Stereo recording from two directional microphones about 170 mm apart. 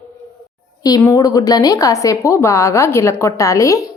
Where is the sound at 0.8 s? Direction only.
20° left (ahead or behind).